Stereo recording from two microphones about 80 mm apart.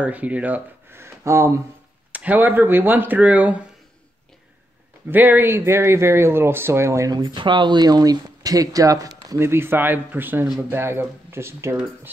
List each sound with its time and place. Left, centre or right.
0.0 s speech: centre
0.9 s a sound: right
2.1 s speech: right
5.1 s speech: right
7.1 s speech: right
9.4 s speech: right